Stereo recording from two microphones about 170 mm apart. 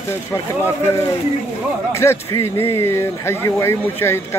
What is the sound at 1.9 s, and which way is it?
Speech, 15° left (ahead or behind).